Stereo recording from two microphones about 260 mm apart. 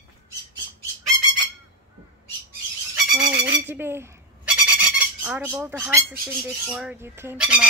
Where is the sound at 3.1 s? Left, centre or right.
Centre.